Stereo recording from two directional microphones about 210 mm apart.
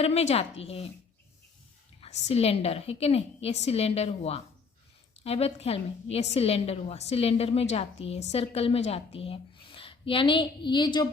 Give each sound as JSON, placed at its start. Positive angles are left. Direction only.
{"t": 0.0, "sound": "a woman's voice", "side_deg": 30}
{"t": 2.2, "sound": "a woman's voice", "side_deg": 30}